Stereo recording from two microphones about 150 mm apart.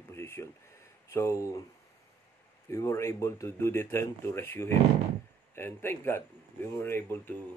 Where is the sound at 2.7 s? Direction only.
20° left (ahead or behind).